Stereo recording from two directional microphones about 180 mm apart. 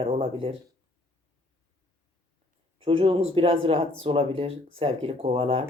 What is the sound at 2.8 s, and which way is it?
Speech, 30° right (ahead or behind).